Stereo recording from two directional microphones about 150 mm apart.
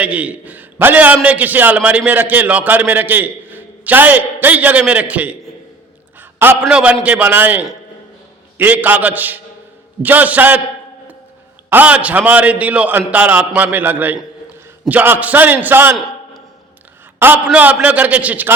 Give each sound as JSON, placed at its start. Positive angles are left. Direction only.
{"t": 0.0, "sound": "a man's voice", "side_deg": -10}
{"t": 11.7, "sound": "a man's voice", "side_deg": -10}
{"t": 17.2, "sound": "a man's voice", "side_deg": -10}